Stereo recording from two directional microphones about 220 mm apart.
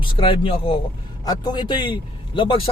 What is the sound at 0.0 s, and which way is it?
Speech, 25° left (ahead or behind).